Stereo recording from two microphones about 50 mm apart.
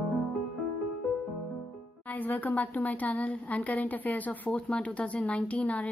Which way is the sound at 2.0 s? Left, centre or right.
Left.